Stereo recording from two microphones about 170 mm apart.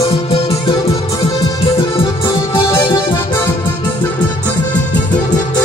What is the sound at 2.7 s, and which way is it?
Music, 15° left (ahead or behind).